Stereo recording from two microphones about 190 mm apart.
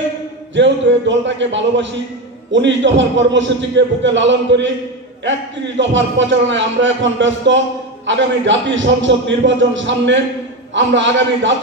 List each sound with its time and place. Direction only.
0.6 s a man's voice: 75° right (ahead or behind)
5.8 s a man's voice: 75° right (ahead or behind)